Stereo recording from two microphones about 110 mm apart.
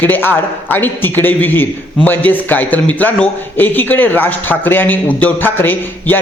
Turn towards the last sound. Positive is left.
turn(degrees=20)  # may be behind; listen again after turning